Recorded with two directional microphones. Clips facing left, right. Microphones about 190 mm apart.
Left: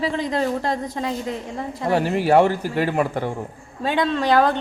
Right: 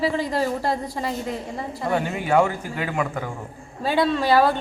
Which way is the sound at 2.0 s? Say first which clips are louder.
Left 4 dB; 35° left (ahead or behind).